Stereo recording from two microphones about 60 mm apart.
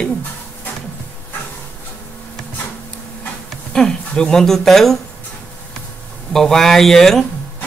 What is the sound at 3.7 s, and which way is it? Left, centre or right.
Speech, centre.